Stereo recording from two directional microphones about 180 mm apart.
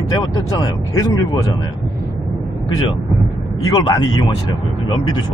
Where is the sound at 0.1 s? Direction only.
20° left (ahead or behind).